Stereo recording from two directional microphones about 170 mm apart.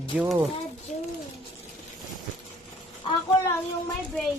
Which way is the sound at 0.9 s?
45° left (ahead or behind).